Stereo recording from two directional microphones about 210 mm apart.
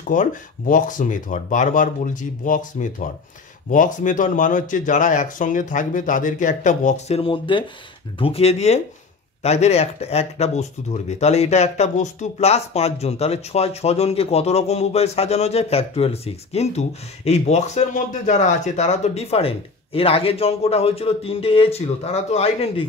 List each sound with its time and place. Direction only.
0.0 s speech: 40° left (ahead or behind)